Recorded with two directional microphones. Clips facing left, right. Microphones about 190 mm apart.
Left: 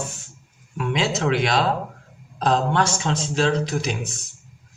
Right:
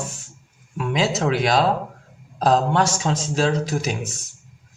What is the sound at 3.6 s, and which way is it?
Speech, 45° right (ahead or behind).